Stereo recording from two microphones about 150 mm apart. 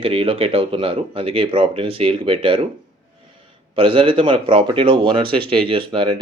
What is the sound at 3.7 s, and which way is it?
Speech, 40° right (ahead or behind).